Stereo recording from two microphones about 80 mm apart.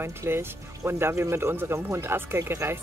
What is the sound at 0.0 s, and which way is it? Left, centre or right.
Speech, right.